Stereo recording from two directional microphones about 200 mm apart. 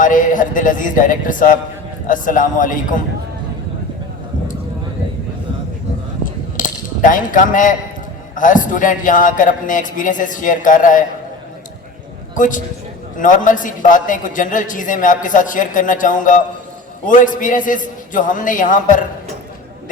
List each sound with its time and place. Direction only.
0.0 s a man's voice: 40° left (ahead or behind)
6.2 s coin: 40° left (ahead or behind)
8.4 s a man's voice: 40° left (ahead or behind)
12.3 s a man's voice: 40° left (ahead or behind)